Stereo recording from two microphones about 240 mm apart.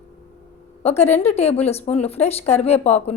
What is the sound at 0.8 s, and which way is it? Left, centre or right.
Speech, left.